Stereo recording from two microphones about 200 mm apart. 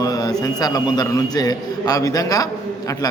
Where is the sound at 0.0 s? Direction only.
20° left (ahead or behind).